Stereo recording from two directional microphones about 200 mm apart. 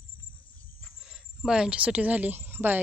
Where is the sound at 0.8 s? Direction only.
Centre (ahead or behind).